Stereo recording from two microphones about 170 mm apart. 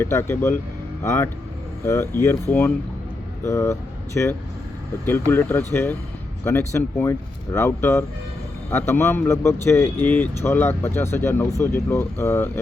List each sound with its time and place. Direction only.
0.0 s speech: 15° left (ahead or behind)